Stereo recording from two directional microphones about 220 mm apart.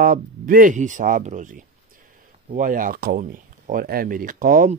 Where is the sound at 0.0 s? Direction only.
40° right (ahead or behind).